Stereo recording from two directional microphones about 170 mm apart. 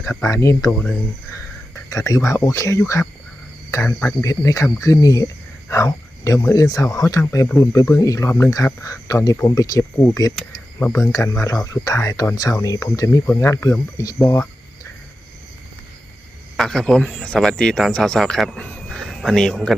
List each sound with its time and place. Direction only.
0.0 s speech: 15° left (ahead or behind)
1.9 s speech: 20° left (ahead or behind)
16.6 s speech: 5° left (ahead or behind)